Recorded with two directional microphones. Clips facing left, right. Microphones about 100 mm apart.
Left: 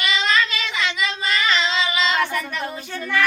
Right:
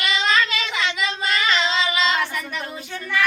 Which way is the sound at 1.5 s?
30° right (ahead or behind).